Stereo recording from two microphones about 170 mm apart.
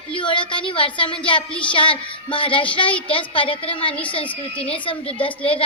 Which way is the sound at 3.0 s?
30° left (ahead or behind).